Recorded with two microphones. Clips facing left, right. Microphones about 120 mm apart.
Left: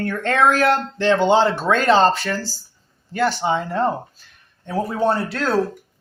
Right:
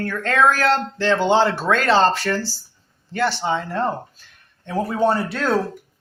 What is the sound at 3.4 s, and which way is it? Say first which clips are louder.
Speech: left 2 dB; 15° left (ahead or behind).